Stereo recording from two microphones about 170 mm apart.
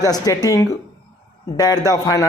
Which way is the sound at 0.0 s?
20° left (ahead or behind).